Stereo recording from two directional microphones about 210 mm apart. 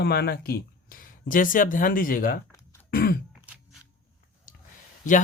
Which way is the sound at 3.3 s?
5° right (ahead or behind).